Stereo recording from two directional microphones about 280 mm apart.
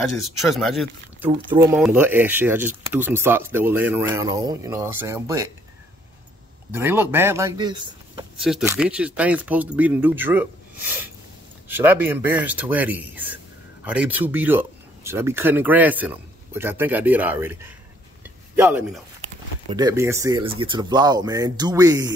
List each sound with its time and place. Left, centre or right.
0.2 s speech: centre
1.3 s speech: centre
6.7 s speech: centre
8.4 s speech: centre
18.6 s speech: centre